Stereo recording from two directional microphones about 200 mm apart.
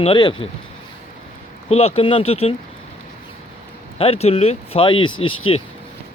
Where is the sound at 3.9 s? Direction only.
30° left (ahead or behind).